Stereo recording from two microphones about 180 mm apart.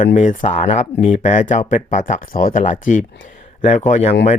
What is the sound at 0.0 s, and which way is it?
Speech, 45° left (ahead or behind).